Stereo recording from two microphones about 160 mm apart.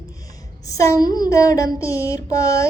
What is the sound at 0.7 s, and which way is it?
Music, 20° left (ahead or behind).